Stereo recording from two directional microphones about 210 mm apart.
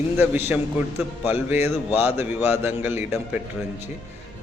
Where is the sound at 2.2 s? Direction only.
10° right (ahead or behind).